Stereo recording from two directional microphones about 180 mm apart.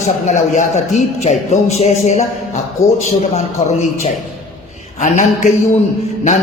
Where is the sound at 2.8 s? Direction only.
15° left (ahead or behind).